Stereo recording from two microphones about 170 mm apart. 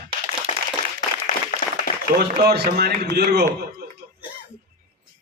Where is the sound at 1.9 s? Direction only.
60° left (ahead or behind).